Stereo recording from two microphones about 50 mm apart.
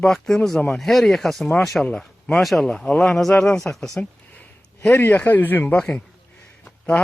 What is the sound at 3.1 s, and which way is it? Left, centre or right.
Speech, centre.